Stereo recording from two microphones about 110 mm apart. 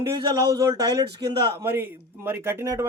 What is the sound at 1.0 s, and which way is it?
Speech, 35° right (ahead or behind).